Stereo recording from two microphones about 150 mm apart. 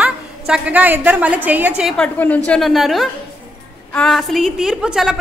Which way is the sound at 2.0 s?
10° left (ahead or behind).